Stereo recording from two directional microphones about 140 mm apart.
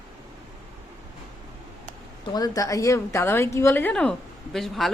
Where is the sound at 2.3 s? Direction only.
25° left (ahead or behind).